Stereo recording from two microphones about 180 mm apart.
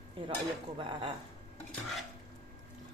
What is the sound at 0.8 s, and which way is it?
Speech, 30° right (ahead or behind).